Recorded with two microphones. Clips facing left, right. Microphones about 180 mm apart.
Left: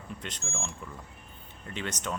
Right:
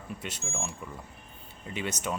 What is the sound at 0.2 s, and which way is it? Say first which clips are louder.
A man's voice: right 1 dB; 10° right (ahead or behind).